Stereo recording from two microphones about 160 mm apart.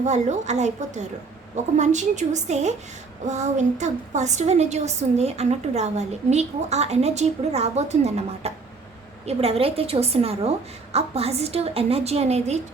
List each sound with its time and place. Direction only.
0.0 s a woman's voice: 45° right (ahead or behind)